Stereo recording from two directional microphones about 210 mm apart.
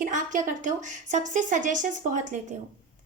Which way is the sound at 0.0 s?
35° right (ahead or behind).